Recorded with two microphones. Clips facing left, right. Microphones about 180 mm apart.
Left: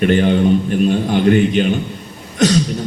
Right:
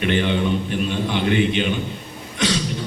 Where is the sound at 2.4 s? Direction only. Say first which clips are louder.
Left 8 dB; 45° left (ahead or behind).